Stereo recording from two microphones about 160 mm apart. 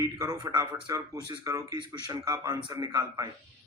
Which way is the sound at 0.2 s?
25° right (ahead or behind).